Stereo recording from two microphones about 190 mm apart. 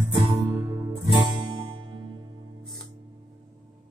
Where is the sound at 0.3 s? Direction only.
20° right (ahead or behind).